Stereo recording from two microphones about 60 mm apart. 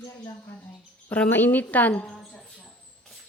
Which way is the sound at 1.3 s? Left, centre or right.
Left.